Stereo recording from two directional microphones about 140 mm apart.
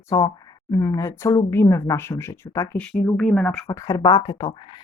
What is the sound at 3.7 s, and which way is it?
Speech, 25° left (ahead or behind).